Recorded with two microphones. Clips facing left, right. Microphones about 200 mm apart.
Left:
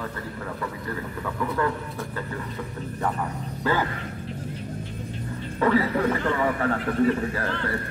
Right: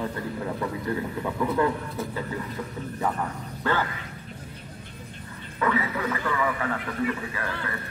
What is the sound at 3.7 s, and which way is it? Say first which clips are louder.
Speech: left 2 dB; 10° left (ahead or behind).